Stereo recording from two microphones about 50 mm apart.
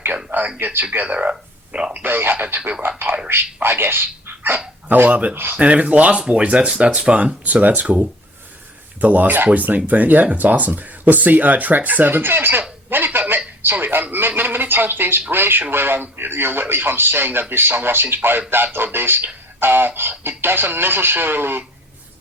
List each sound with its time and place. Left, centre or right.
0.6 s speech: right
1.0 s a sound: right
1.9 s speech: right
5.0 s speech: right
5.3 s speech: right
5.5 s speech: right
13.1 s telephone: right
13.6 s a man's voice: right